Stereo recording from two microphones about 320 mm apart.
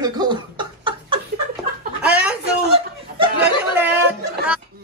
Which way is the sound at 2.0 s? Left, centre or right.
Centre.